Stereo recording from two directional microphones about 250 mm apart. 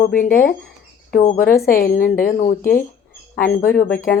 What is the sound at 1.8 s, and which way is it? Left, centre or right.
Speech, left.